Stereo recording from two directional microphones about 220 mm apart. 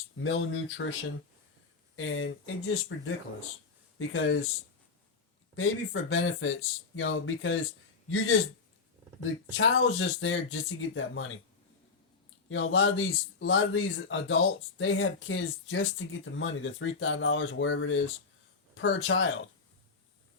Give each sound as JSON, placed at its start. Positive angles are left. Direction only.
{"t": 0.2, "sound": "speech", "side_deg": 65}
{"t": 2.0, "sound": "speech", "side_deg": 65}
{"t": 5.5, "sound": "speech", "side_deg": 65}
{"t": 9.6, "sound": "speech", "side_deg": 60}
{"t": 12.5, "sound": "speech", "side_deg": 65}